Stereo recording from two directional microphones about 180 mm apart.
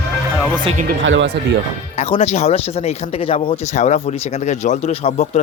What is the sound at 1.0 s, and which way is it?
Speech, 90° right.